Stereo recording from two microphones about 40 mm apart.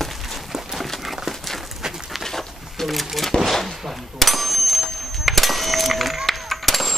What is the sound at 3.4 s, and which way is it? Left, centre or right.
Gunshot, centre.